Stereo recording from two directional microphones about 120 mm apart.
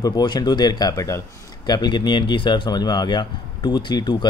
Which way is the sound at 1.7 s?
35° left (ahead or behind).